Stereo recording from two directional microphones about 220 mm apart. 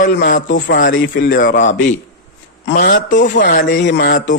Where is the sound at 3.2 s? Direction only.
45° left (ahead or behind).